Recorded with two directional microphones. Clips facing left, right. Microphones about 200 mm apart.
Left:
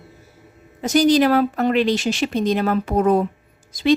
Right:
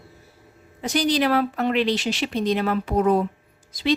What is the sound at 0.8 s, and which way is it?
A woman's voice, 45° left (ahead or behind).